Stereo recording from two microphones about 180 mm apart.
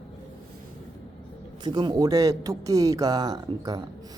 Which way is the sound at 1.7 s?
25° right (ahead or behind).